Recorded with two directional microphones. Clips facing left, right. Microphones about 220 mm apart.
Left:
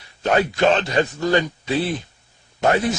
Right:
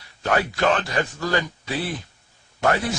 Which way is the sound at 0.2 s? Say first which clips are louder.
Left 4 dB; 20° left (ahead or behind).